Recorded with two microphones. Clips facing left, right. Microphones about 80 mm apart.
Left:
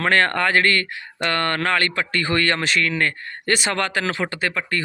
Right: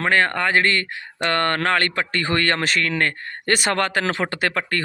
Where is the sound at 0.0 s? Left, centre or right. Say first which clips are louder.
Left 1 dB; centre.